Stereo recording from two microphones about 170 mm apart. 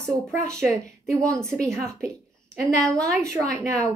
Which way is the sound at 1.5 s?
Centre (ahead or behind).